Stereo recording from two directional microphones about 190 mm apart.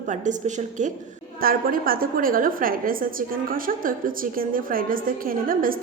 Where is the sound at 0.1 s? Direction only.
40° right (ahead or behind).